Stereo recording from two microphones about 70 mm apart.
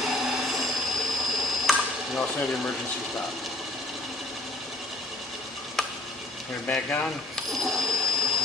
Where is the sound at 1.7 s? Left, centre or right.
Centre.